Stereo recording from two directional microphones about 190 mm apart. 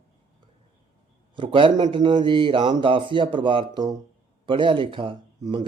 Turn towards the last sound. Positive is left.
turn(degrees=-25)  # may be behind; listen again after turning